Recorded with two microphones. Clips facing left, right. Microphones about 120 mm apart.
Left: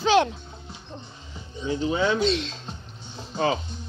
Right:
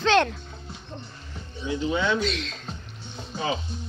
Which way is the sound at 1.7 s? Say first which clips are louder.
Left 1 dB; 40° left (ahead or behind).